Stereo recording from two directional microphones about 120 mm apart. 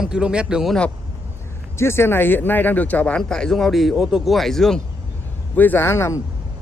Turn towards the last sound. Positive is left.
turn(degrees=25)  # may be behind; listen again after turning